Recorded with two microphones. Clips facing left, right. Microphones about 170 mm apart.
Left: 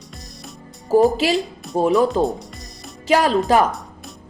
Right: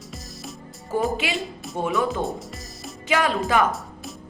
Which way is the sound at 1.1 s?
35° left (ahead or behind).